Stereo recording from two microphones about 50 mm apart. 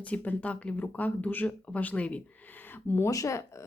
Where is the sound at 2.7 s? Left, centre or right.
Left.